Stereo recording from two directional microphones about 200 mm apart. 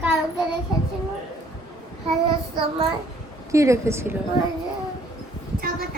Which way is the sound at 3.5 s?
15° right (ahead or behind).